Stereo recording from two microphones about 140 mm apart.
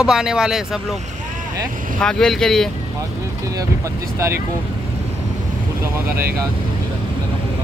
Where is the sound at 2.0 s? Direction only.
5° left (ahead or behind).